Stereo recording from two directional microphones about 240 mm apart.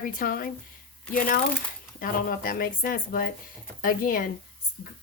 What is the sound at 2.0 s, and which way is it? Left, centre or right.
Speech, left.